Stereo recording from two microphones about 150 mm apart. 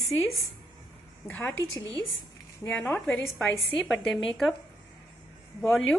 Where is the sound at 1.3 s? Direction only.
10° left (ahead or behind).